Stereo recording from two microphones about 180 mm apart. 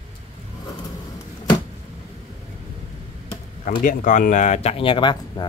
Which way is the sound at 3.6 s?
45° left (ahead or behind).